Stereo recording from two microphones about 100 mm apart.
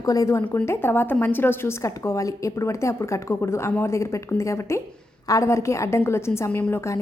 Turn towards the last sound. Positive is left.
turn(degrees=25)  # may be behind; listen again after turning